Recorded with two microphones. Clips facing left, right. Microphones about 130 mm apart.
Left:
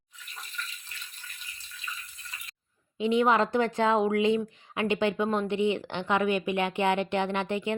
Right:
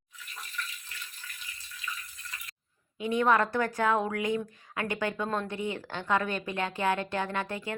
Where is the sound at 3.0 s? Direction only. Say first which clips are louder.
Left 2 dB; 20° left (ahead or behind).